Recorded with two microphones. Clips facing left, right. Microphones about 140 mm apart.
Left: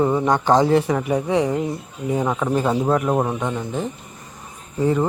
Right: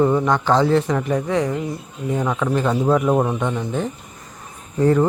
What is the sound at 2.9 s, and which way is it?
Speech, centre (ahead or behind).